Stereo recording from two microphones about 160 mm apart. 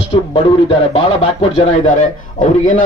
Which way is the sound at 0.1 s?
30° left (ahead or behind).